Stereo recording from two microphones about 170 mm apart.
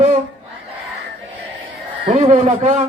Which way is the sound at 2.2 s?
50° right (ahead or behind).